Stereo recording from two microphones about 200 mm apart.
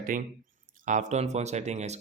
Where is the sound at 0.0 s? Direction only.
40° right (ahead or behind).